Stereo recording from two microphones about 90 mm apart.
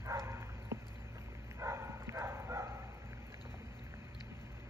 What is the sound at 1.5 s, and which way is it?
Dog, 30° right (ahead or behind).